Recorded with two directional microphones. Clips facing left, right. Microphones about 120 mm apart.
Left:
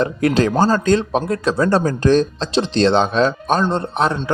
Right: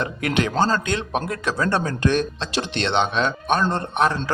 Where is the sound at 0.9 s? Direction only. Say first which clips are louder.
Left 8 dB; 30° left (ahead or behind).